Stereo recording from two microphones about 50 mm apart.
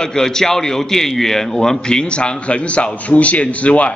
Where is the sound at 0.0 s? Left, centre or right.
Centre.